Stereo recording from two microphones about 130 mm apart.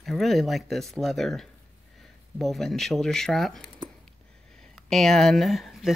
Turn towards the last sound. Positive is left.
turn(degrees=0)  # may be behind; listen again after turning